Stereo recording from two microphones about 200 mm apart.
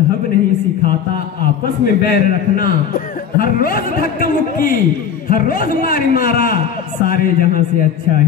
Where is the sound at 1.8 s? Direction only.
45° left (ahead or behind).